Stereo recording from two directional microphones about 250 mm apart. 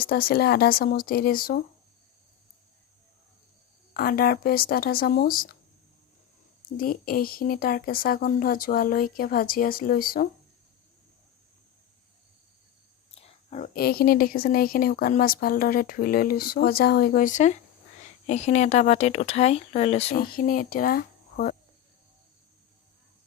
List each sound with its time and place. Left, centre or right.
0.0 s speech: left
3.9 s speech: left
6.7 s speech: left
13.1 s speech: left